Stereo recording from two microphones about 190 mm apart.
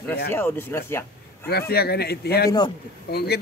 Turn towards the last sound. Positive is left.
turn(degrees=55)  # may be behind; listen again after turning